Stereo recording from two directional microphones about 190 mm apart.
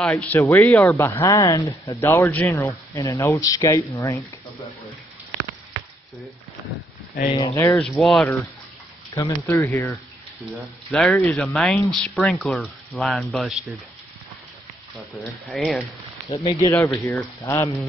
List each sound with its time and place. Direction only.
0.0 s speech: 5° left (ahead or behind)
7.2 s speech: 20° left (ahead or behind); by 8.3 s centre (ahead or behind)
9.5 s speech: 10° left (ahead or behind)
15.4 s speech: centre (ahead or behind)
16.3 s speech: 25° left (ahead or behind)